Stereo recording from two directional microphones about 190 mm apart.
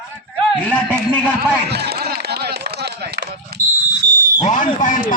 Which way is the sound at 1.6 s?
60° right (ahead or behind).